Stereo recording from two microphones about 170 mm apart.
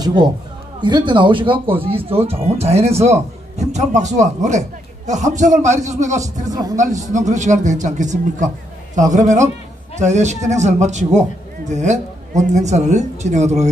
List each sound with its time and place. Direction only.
0.0 s a man's voice: 25° right (ahead or behind); by 6.3 s 45° right (ahead or behind)
6.4 s speech: 20° right (ahead or behind)
6.8 s a man's voice: 45° right (ahead or behind)